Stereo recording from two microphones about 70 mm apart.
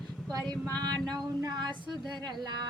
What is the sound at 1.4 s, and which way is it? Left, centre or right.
Speech, right.